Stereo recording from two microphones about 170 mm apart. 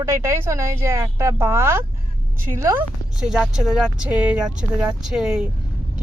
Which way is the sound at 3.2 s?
5° right (ahead or behind).